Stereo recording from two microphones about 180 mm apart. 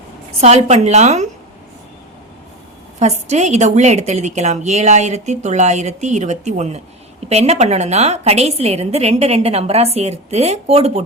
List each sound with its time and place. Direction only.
0.4 s a woman's voice: 40° right (ahead or behind)
3.0 s a woman's voice: 40° right (ahead or behind)